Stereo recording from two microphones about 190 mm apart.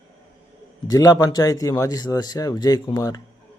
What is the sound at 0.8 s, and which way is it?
A man's voice, 20° left (ahead or behind).